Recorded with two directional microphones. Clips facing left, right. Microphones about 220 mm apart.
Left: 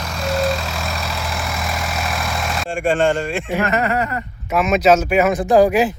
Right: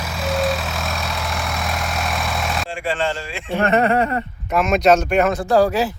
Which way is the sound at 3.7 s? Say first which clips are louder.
Right 3 dB; 30° right (ahead or behind).